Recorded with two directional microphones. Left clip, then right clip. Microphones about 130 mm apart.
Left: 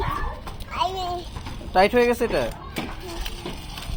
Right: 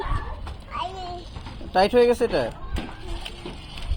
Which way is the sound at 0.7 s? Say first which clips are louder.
Left 6 dB; 25° left (ahead or behind).